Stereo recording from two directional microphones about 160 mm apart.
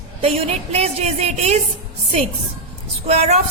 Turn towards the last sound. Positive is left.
turn(degrees=-40)  # may be behind; listen again after turning